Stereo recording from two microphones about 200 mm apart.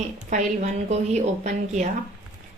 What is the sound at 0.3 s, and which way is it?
A woman's voice, 35° right (ahead or behind).